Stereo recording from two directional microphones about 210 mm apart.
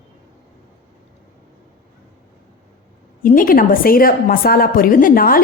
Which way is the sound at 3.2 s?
40° left (ahead or behind).